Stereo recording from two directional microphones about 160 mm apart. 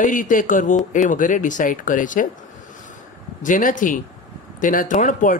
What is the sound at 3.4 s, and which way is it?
Speech, 55° left (ahead or behind).